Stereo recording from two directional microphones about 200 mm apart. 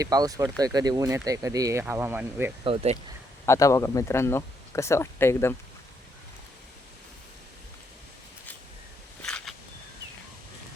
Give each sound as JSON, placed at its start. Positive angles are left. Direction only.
{"t": 0.0, "sound": "speech", "side_deg": -20}
{"t": 2.6, "sound": "speech", "side_deg": -30}
{"t": 3.4, "sound": "speech", "side_deg": 15}
{"t": 9.2, "sound": "a sound", "side_deg": 5}